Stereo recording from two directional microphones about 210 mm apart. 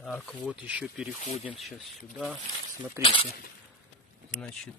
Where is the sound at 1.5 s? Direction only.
Centre (ahead or behind).